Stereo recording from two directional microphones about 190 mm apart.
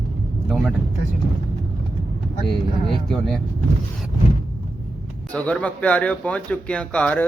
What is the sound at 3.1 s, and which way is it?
Speech, 5° left (ahead or behind).